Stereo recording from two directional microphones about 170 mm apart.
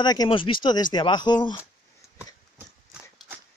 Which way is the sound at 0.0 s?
25° left (ahead or behind).